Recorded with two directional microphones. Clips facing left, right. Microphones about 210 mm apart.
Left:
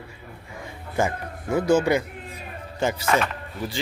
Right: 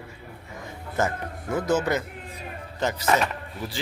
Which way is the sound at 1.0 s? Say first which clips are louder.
Left 2 dB; 10° left (ahead or behind).